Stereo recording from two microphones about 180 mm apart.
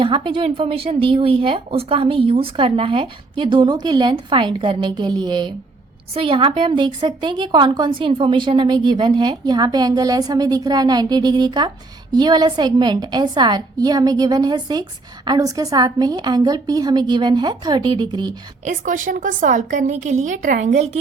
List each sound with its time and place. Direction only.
0.0 s a woman's voice: 30° right (ahead or behind)
18.6 s a woman's voice: 45° right (ahead or behind)